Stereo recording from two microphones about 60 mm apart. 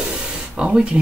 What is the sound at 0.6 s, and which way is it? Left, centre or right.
Speech, centre.